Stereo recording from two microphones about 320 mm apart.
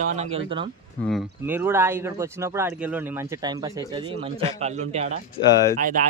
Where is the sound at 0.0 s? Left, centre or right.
Right.